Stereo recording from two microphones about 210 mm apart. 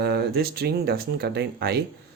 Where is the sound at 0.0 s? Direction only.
50° right (ahead or behind).